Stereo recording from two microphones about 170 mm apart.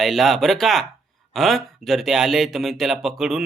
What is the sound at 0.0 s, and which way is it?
Speech, centre (ahead or behind).